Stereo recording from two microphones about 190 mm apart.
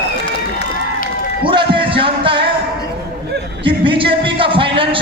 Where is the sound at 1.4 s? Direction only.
25° right (ahead or behind).